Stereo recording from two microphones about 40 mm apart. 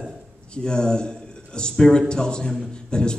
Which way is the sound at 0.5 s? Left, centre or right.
Left.